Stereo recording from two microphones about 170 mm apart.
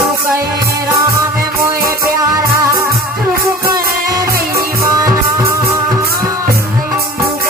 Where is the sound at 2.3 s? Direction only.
20° right (ahead or behind).